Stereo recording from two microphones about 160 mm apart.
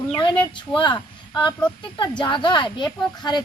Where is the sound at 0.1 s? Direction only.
30° left (ahead or behind).